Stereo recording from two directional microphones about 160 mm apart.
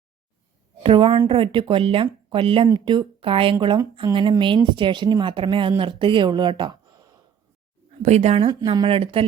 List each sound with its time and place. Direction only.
0.8 s a woman's voice: 35° right (ahead or behind)
8.0 s speech: 45° right (ahead or behind)
8.4 s a woman's voice: 25° right (ahead or behind)